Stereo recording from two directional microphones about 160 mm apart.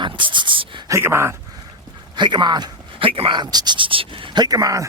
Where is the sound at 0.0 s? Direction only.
30° right (ahead or behind).